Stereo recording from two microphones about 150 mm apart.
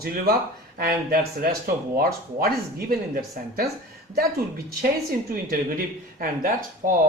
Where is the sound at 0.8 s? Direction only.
70° right (ahead or behind).